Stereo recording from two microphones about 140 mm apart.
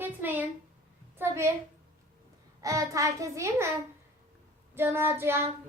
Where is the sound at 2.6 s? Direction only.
25° right (ahead or behind).